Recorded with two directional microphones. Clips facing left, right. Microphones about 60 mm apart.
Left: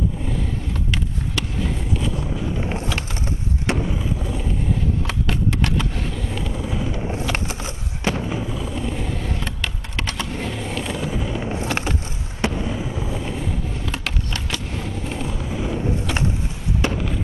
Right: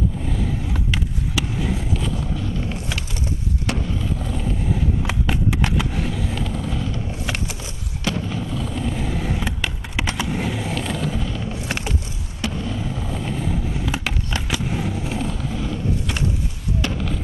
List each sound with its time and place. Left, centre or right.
0.9 s skateboard: centre
2.3 s vehicle: centre
3.9 s boat: centre
5.0 s vehicle: centre
7.3 s a sound: left
8.5 s skateboard: centre
11.3 s a sound: left
12.4 s skateboard: left
16.8 s fireworks: left